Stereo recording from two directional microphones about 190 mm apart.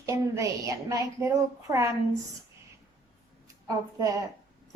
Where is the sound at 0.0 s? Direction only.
15° right (ahead or behind).